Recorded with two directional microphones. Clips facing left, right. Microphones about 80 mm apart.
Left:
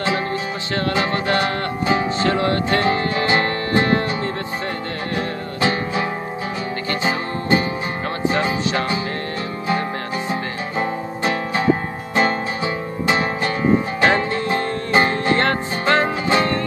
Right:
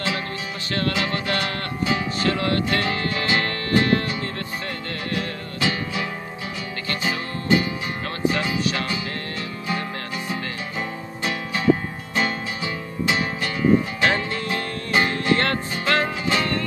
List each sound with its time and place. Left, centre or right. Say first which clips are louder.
0.7 s music: left 4 dB; left
5.1 s music: left 4 dB; left
10.3 s music: left 5 dB; left
13.0 s music: left 4 dB; left